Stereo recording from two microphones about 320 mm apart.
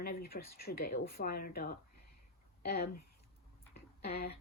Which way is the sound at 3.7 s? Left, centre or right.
Left.